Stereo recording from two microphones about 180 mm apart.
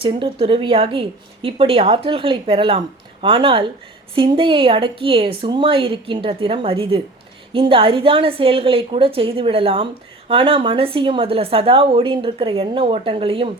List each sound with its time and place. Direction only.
0.0 s a woman's voice: 30° right (ahead or behind)